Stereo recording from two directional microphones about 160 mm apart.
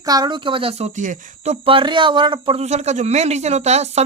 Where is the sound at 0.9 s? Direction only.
50° right (ahead or behind).